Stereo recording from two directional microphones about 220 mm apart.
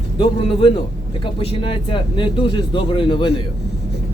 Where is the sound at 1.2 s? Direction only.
25° left (ahead or behind).